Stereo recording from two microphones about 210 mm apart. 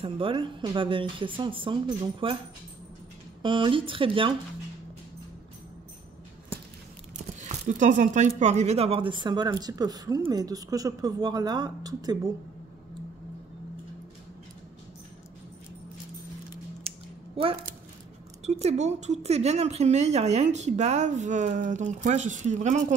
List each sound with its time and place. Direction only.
0.0 s speech: 25° right (ahead or behind)
3.4 s speech: 25° right (ahead or behind)
7.3 s speech: 35° right (ahead or behind); by 12.2 s 20° right (ahead or behind)
16.9 s a sound: 30° right (ahead or behind)
17.4 s speech: 25° right (ahead or behind)